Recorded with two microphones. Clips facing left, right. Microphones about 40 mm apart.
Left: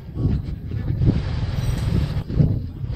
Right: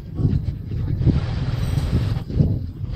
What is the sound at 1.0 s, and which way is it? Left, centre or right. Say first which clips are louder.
Vehicle: right 1 dB; centre.